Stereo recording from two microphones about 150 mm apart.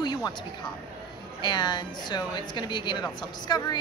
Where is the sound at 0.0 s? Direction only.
30° left (ahead or behind).